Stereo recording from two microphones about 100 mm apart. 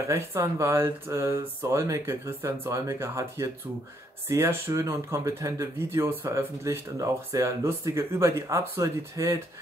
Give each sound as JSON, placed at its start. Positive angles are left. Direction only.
{"t": 0.1, "sound": "speech", "side_deg": -30}